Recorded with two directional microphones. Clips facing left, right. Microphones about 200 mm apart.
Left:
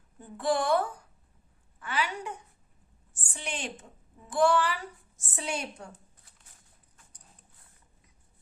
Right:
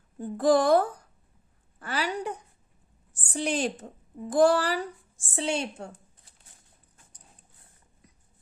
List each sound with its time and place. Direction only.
0.2 s a woman's voice: 40° right (ahead or behind)
5.3 s a woman's voice: 25° right (ahead or behind)